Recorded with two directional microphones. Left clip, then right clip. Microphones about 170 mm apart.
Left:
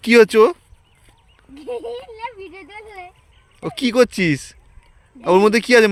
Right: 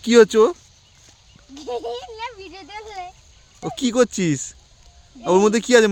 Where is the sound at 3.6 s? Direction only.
Centre (ahead or behind).